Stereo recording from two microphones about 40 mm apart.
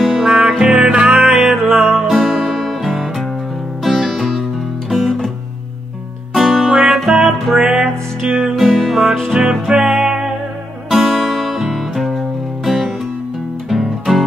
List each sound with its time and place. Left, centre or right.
0.0 s music: centre
1.7 s music: centre
2.0 s music: centre
4.8 s music: centre
6.3 s music: centre
7.2 s music: centre
8.7 s music: centre
9.3 s music: centre
10.9 s music: centre